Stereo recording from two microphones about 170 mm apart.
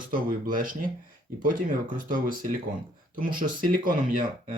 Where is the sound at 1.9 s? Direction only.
55° right (ahead or behind).